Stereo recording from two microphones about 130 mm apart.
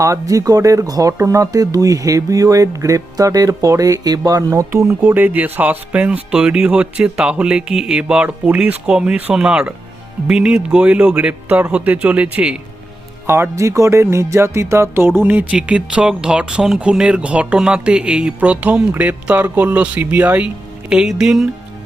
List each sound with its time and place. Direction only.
0.0 s speech: 25° right (ahead or behind)
5.0 s music: 15° right (ahead or behind)
20.9 s speech: 5° right (ahead or behind)